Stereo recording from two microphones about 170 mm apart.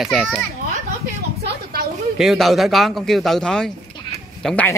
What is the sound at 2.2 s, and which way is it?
Speech, centre (ahead or behind).